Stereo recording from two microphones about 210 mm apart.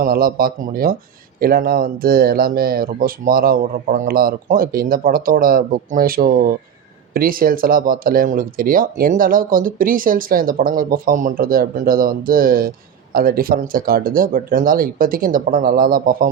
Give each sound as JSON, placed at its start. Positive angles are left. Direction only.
{"t": 0.0, "sound": "speech", "side_deg": -45}